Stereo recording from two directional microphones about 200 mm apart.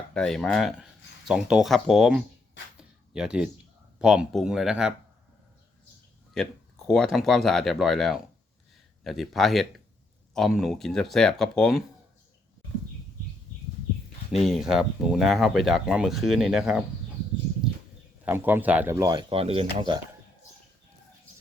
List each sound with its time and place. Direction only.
0.1 s speech: 5° left (ahead or behind)
6.3 s speech: centre (ahead or behind)
14.3 s speech: centre (ahead or behind)
18.3 s a man's voice: 10° right (ahead or behind)
19.3 s speech: 30° right (ahead or behind)